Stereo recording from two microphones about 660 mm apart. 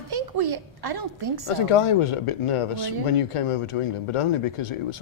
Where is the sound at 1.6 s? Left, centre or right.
Left.